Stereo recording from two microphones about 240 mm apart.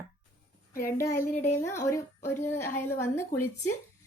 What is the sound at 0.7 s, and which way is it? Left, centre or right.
Speech, left.